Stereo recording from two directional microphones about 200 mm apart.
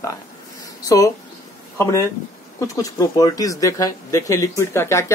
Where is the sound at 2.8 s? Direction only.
20° left (ahead or behind).